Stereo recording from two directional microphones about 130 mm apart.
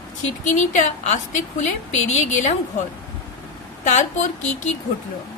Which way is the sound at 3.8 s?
65° left (ahead or behind).